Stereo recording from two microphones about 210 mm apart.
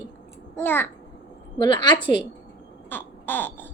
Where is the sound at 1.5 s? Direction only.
20° left (ahead or behind).